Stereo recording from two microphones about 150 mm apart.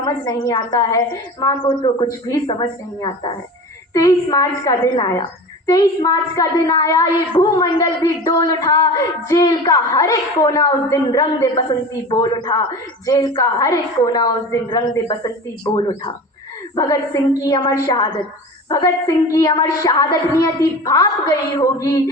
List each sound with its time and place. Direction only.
0.0 s child singing: 25° left (ahead or behind)